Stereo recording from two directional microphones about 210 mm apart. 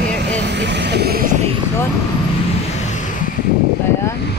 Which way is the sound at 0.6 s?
55° right (ahead or behind).